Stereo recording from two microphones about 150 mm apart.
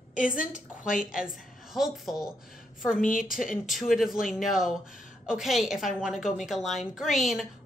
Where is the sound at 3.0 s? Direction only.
65° left (ahead or behind).